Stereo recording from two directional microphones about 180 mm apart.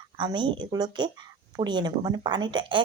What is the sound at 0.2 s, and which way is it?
Speech, 25° right (ahead or behind).